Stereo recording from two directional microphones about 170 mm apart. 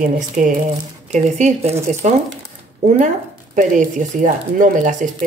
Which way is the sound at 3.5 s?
50° right (ahead or behind).